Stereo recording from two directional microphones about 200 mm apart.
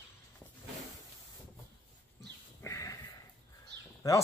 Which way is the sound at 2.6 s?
15° left (ahead or behind).